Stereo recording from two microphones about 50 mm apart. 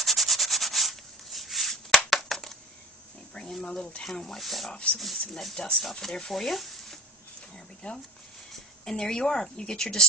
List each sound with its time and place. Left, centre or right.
0.0 s rub: centre
2.0 s crushing: centre
3.6 s a woman's voice: centre
7.5 s a sound: centre
8.8 s a woman's voice: centre